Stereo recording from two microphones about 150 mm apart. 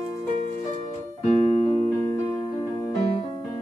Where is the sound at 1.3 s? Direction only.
40° left (ahead or behind).